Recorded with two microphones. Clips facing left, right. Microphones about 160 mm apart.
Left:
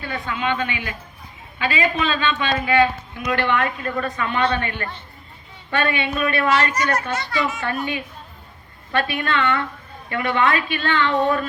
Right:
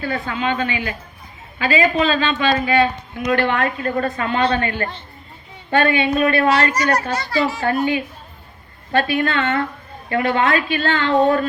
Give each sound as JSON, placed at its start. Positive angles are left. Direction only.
{"t": 0.0, "sound": "a man's voice", "side_deg": -35}